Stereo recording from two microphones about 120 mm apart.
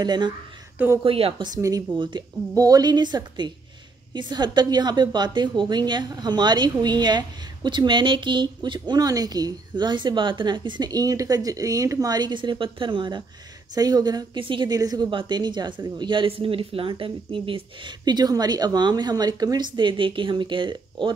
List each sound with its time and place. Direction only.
0.0 s a woman's voice: 35° right (ahead or behind)
1.0 s speech: 50° right (ahead or behind)
1.4 s a woman's voice: 30° right (ahead or behind)
2.5 s a woman's voice: 30° right (ahead or behind)
15.0 s a woman's voice: 40° right (ahead or behind)